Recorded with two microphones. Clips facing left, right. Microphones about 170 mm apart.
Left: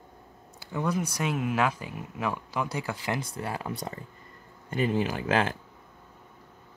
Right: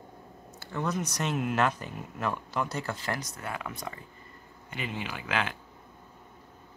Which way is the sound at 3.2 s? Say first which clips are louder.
Left 3 dB; 30° left (ahead or behind).